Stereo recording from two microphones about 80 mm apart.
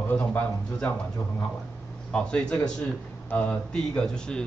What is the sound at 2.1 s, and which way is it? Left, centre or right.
Speech, centre.